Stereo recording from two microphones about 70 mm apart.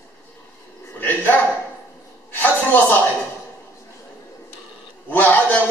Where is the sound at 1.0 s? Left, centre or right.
Left.